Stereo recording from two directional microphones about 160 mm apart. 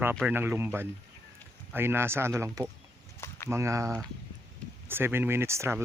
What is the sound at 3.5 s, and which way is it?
Speech, 20° right (ahead or behind).